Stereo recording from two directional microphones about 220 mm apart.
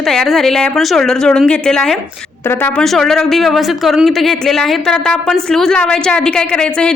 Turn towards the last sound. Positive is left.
turn(degrees=5)  # may be behind; listen again after turning